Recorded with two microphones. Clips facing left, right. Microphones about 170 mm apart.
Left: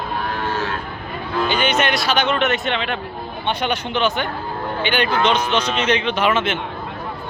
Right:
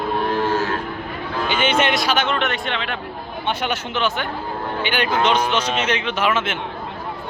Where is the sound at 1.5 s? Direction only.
25° right (ahead or behind).